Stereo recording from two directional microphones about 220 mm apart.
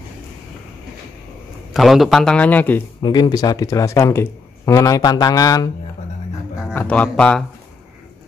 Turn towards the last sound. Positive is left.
turn(degrees=5)  # may be behind; listen again after turning